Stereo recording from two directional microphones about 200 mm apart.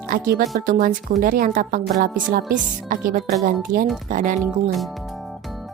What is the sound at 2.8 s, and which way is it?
Speech, 45° right (ahead or behind).